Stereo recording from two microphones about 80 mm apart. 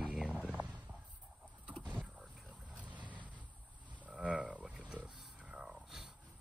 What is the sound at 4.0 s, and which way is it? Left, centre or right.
Livestock, centre.